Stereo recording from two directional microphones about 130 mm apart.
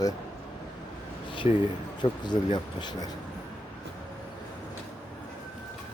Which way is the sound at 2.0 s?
35° left (ahead or behind).